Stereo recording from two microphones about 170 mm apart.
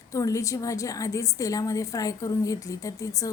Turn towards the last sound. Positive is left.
turn(degrees=20)  # may be behind; listen again after turning